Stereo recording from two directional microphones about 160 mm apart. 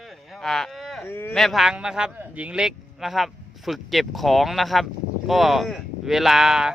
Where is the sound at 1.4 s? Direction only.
Centre (ahead or behind).